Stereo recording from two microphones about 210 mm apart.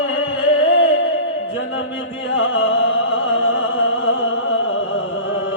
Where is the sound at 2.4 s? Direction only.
65° left (ahead or behind).